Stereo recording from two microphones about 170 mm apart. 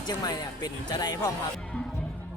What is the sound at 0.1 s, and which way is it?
Speech, 25° left (ahead or behind).